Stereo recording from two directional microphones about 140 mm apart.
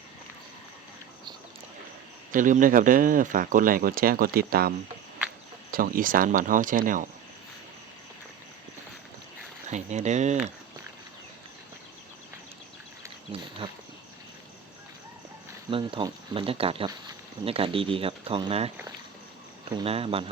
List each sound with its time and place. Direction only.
2.3 s speech: 70° right (ahead or behind); by 4.7 s 90° right
5.7 s speech: 90° right; by 7.1 s 70° right (ahead or behind)
9.6 s speech: 55° right (ahead or behind)
13.3 s speech: 45° right (ahead or behind)
15.7 s speech: 40° right (ahead or behind)
19.8 s speech: 45° right (ahead or behind)